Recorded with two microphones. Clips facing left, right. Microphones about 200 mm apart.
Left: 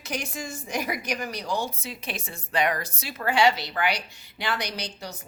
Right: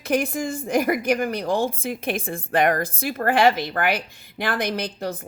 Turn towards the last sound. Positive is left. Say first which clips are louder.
# right 9 dB
turn(degrees=-55)  # may be behind; listen again after turning